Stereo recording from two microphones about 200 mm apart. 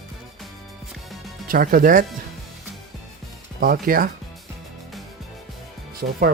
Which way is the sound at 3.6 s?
45° right (ahead or behind).